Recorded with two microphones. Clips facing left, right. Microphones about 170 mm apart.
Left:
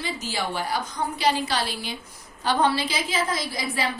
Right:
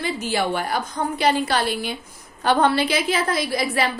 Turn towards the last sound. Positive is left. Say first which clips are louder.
# right 6 dB
turn(degrees=-65)  # may be behind; listen again after turning